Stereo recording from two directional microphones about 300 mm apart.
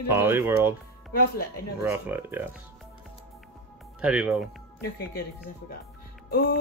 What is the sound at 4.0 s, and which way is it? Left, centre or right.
Speech, centre.